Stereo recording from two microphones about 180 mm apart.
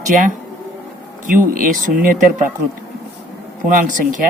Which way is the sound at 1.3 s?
50° right (ahead or behind).